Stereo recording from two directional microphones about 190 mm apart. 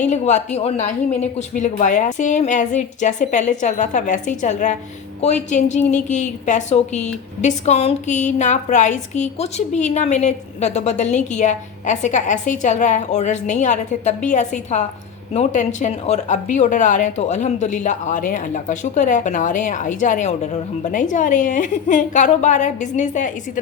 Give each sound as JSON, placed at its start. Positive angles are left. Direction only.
{"t": 0.1, "sound": "a woman's voice", "side_deg": 35}